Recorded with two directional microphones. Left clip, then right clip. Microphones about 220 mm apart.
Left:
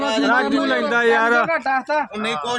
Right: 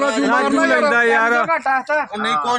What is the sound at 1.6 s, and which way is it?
Speech, 10° right (ahead or behind).